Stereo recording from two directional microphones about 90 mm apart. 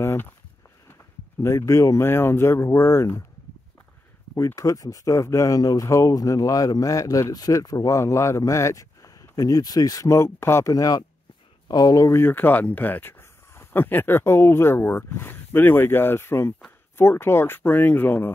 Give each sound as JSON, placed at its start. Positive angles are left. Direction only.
{"t": 0.0, "sound": "a sound", "side_deg": 30}
{"t": 1.4, "sound": "speech", "side_deg": 30}
{"t": 4.6, "sound": "speech", "side_deg": 40}
{"t": 10.7, "sound": "speech", "side_deg": 45}